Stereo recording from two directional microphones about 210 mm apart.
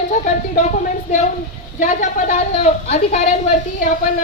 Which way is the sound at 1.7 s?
35° left (ahead or behind).